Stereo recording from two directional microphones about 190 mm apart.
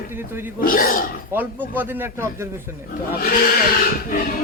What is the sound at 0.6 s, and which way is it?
Speech, 50° left (ahead or behind).